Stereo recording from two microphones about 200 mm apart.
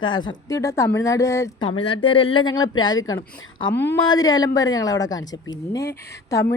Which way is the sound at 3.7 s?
60° left (ahead or behind).